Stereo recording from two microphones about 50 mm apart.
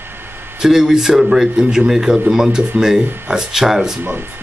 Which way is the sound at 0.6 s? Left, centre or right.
Centre.